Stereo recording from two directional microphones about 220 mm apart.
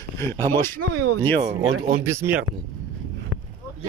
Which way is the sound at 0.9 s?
90° right.